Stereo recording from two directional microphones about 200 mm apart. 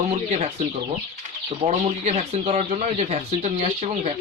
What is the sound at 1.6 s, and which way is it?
Speech, 30° right (ahead or behind).